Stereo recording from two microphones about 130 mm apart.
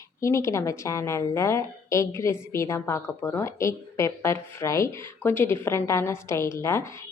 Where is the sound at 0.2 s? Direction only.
25° left (ahead or behind).